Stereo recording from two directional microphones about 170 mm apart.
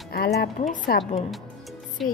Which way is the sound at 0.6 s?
50° left (ahead or behind).